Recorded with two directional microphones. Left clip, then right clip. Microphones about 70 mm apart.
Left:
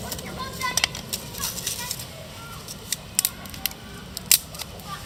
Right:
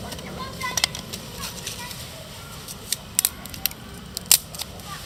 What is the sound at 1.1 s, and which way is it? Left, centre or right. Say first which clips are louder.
Horse: left 2 dB; left.